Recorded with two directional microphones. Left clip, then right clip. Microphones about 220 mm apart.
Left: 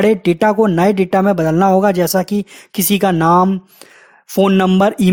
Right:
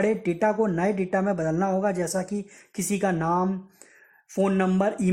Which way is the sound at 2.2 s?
60° left (ahead or behind).